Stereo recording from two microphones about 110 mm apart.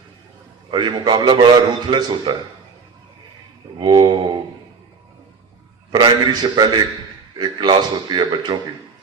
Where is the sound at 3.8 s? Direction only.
45° right (ahead or behind).